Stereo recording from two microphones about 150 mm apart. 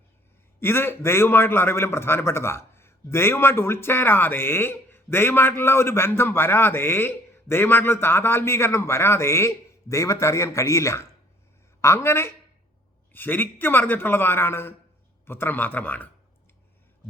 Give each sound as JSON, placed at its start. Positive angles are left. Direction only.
{"t": 0.6, "sound": "a man's voice", "side_deg": 15}